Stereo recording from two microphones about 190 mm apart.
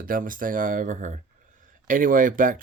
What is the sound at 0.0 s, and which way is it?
Speech, 45° right (ahead or behind).